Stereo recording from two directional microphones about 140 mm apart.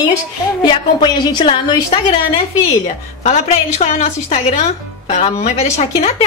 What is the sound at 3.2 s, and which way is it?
A woman's voice, 50° left (ahead or behind).